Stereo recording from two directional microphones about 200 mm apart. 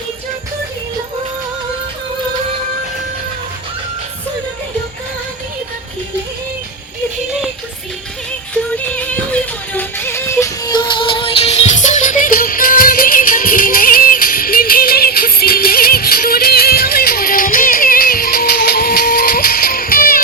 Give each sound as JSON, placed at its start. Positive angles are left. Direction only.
{"t": 9.0, "sound": "music", "side_deg": 5}